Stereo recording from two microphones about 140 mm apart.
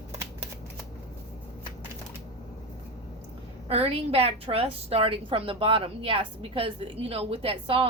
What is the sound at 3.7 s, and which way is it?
A woman's voice, 45° right (ahead or behind).